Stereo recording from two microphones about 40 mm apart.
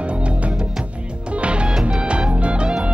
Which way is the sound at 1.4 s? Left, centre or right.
Right.